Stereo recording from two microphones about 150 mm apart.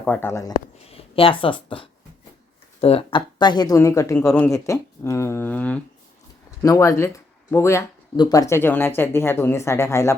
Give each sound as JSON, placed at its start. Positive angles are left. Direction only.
{"t": 0.0, "sound": "speech", "side_deg": 10}
{"t": 0.9, "sound": "speech", "side_deg": 40}
{"t": 6.6, "sound": "speech", "side_deg": 20}